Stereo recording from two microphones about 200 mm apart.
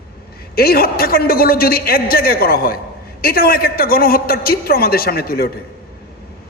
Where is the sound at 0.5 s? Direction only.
50° left (ahead or behind).